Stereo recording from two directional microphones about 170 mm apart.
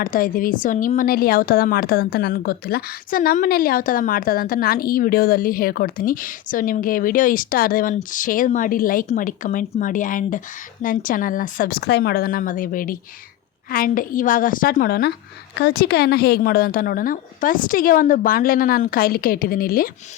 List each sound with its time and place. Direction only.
0.0 s a woman's voice: 55° left (ahead or behind)